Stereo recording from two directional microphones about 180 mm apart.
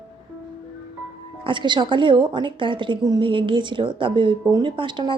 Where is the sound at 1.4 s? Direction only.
25° right (ahead or behind).